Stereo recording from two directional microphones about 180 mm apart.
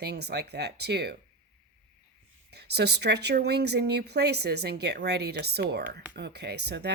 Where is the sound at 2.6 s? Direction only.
65° right (ahead or behind).